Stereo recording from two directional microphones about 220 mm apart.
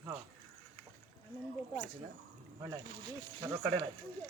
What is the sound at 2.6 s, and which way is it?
Speech, 15° right (ahead or behind).